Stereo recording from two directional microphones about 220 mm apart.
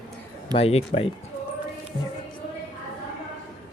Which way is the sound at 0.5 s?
25° left (ahead or behind).